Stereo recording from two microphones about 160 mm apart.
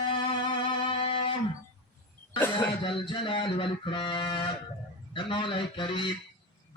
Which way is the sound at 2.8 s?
30° left (ahead or behind).